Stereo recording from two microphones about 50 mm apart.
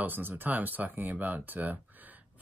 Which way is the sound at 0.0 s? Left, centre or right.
Right.